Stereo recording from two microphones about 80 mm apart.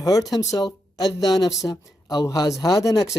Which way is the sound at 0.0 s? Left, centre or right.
Left.